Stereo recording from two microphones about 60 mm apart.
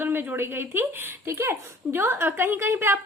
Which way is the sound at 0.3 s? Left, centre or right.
Right.